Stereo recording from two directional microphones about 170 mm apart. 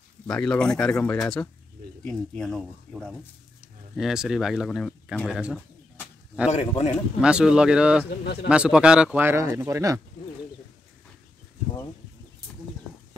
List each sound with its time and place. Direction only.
0.3 s speech: 5° left (ahead or behind)
6.5 s a man's voice: 40° left (ahead or behind)
7.2 s speech: 5° right (ahead or behind)